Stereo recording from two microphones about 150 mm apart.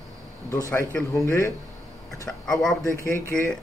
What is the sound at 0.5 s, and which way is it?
A man's voice, 20° left (ahead or behind).